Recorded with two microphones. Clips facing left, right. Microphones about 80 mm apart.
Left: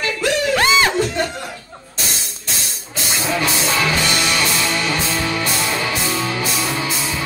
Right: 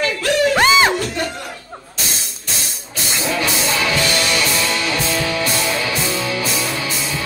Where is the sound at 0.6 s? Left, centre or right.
Right.